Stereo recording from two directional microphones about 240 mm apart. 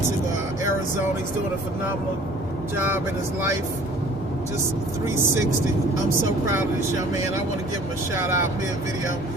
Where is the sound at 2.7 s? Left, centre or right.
Centre.